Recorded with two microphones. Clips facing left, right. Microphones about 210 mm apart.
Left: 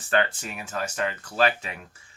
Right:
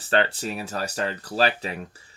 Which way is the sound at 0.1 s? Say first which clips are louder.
Right 2 dB; 30° right (ahead or behind).